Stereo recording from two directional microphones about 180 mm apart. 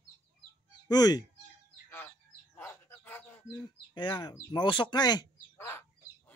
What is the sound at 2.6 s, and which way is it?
Bird, 10° left (ahead or behind).